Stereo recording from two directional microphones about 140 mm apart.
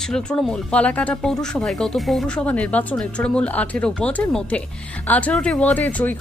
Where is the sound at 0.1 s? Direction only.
5° left (ahead or behind).